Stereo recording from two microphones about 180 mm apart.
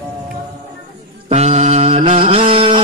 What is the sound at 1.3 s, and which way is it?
Mantra, 40° right (ahead or behind).